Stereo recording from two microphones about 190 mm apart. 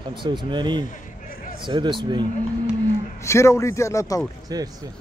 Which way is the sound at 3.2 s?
15° left (ahead or behind).